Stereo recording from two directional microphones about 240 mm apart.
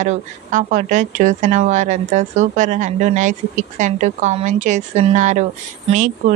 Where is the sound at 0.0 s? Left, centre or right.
Right.